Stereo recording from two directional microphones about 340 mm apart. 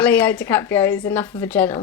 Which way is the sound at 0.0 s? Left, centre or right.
Centre.